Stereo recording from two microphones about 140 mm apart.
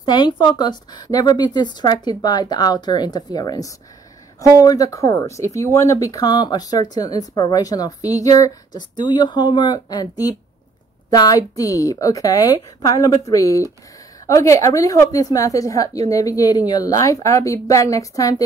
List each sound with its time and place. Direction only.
0.0 s speech: 35° left (ahead or behind)